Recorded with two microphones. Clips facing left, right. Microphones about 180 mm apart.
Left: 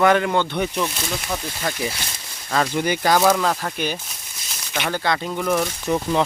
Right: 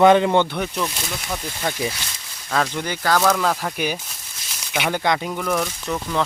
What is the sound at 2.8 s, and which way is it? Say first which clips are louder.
Speech: left 3 dB; 15° left (ahead or behind).